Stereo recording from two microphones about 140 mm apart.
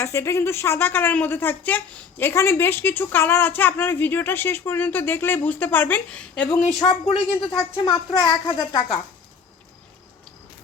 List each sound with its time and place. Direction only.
0.0 s speech: 20° left (ahead or behind)
6.8 s a woman's voice: 40° left (ahead or behind)